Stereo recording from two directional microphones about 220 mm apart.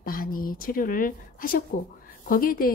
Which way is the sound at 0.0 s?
40° left (ahead or behind).